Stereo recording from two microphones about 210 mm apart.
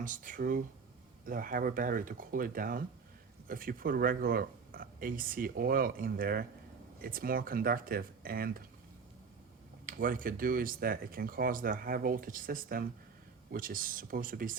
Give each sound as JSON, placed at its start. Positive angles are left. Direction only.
{"t": 0.0, "sound": "speech", "side_deg": -40}
{"t": 9.8, "sound": "speech", "side_deg": -40}